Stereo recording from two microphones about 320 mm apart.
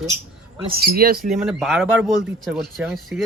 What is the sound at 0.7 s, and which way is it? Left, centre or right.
Speech, right.